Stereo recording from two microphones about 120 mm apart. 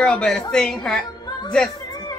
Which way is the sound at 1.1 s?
35° left (ahead or behind).